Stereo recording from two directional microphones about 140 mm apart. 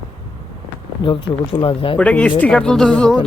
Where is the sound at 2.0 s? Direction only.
10° left (ahead or behind).